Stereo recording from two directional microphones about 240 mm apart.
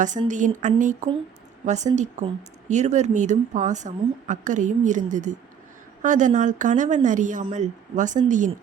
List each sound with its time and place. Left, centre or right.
0.3 s speech: right